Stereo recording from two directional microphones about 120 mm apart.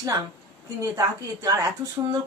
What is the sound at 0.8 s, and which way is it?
A woman's voice, 30° right (ahead or behind).